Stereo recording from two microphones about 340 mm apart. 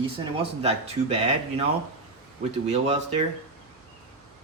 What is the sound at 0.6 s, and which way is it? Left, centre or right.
A man's voice, centre.